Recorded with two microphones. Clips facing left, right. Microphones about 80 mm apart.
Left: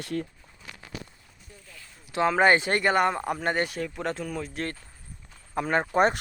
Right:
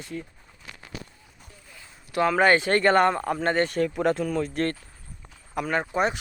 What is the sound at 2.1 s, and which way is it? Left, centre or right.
Speech, left.